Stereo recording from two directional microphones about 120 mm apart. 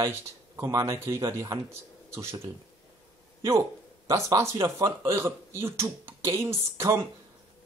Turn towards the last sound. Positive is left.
turn(degrees=-20)  # may be behind; listen again after turning